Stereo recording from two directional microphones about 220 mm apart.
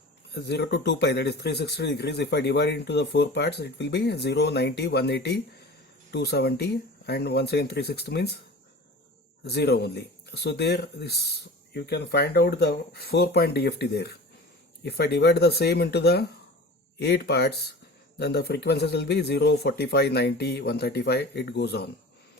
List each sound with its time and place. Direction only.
0.3 s speech: 50° left (ahead or behind)
9.4 s speech: 50° left (ahead or behind)